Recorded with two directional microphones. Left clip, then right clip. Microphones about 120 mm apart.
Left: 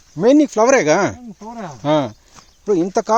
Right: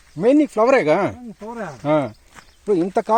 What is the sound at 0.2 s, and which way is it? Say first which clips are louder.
Speech: left 3 dB; 40° left (ahead or behind).